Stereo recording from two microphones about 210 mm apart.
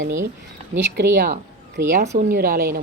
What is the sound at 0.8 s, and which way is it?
A woman's voice, 55° right (ahead or behind).